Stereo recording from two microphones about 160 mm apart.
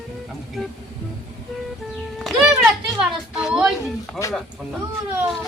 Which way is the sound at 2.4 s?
5° right (ahead or behind).